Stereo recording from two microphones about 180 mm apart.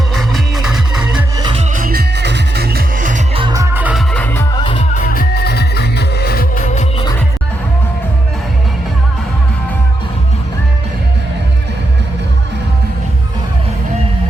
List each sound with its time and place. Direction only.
0.1 s music: centre (ahead or behind)
1.4 s music: 25° right (ahead or behind)
1.7 s music: 55° right (ahead or behind)
3.3 s music: 25° right (ahead or behind)
4.1 s music: 10° left (ahead or behind)
4.5 s music: 25° left (ahead or behind)
4.9 s music: 50° left (ahead or behind)